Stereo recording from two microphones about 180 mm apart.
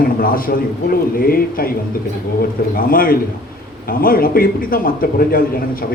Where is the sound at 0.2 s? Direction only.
50° left (ahead or behind).